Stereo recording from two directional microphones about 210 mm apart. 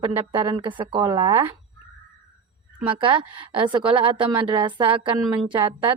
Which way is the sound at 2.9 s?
25° right (ahead or behind).